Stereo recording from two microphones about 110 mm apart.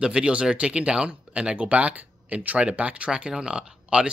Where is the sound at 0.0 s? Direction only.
10° right (ahead or behind).